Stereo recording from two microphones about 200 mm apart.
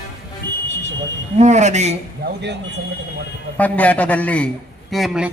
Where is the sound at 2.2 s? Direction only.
60° right (ahead or behind).